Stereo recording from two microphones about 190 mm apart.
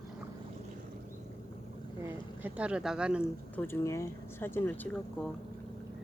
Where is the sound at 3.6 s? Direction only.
15° left (ahead or behind).